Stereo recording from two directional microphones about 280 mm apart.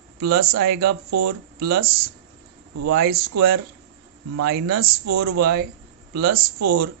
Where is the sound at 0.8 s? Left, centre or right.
Right.